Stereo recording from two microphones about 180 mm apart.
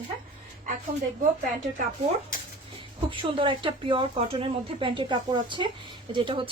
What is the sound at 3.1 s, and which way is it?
Speech, 30° right (ahead or behind).